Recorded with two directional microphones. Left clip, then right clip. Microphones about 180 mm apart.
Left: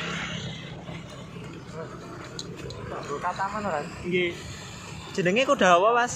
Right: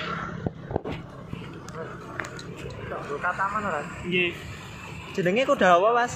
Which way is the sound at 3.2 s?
55° left (ahead or behind).